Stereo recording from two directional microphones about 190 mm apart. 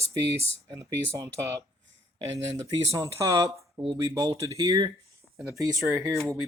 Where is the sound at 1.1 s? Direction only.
15° right (ahead or behind).